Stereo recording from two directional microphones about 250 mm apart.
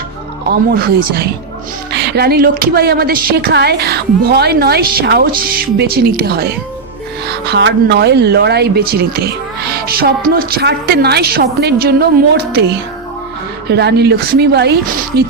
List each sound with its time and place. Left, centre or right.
0.4 s a woman's voice: right
13.7 s a woman's voice: right